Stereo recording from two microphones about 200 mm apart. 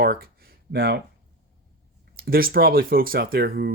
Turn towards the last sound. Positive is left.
turn(degrees=-50)  # may be behind; listen again after turning